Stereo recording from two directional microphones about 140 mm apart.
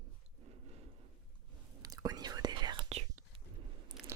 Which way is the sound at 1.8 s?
25° right (ahead or behind).